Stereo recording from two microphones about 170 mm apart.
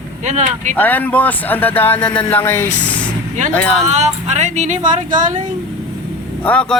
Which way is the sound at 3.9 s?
40° right (ahead or behind).